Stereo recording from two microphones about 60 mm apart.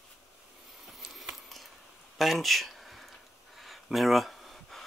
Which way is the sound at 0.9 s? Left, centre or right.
Centre.